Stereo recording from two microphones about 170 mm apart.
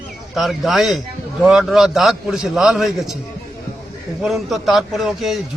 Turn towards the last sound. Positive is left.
turn(degrees=0)  # may be behind; listen again after turning